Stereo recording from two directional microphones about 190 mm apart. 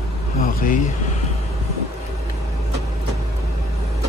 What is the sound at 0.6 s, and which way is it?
Speech, 45° left (ahead or behind).